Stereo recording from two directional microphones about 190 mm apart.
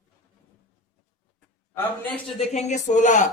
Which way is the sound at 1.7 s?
10° left (ahead or behind).